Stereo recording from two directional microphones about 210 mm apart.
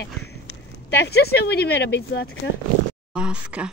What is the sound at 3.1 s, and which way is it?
Speech, 5° right (ahead or behind).